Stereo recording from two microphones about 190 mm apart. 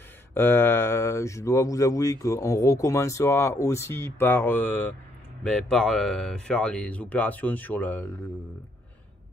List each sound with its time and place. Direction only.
0.3 s speech: 10° left (ahead or behind)